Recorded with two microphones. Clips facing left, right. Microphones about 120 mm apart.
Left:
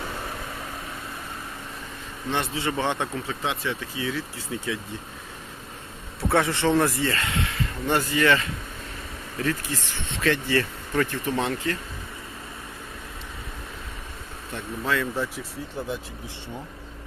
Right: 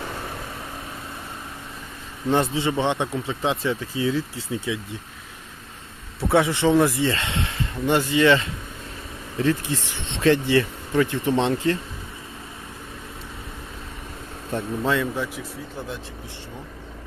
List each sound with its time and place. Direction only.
2.3 s speech: 30° right (ahead or behind); by 3.3 s 15° right (ahead or behind)
3.4 s speech: 25° right (ahead or behind)
6.2 s speech: 15° right (ahead or behind)
7.9 s speech: 20° right (ahead or behind)
14.8 s speech: 25° right (ahead or behind)